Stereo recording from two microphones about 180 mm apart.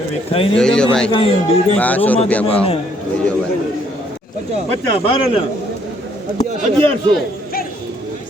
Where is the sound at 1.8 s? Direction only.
10° left (ahead or behind).